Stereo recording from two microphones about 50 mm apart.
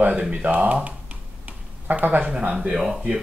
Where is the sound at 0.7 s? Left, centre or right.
Right.